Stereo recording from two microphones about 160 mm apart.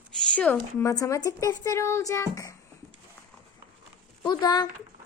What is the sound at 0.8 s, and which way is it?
Speech, 20° left (ahead or behind).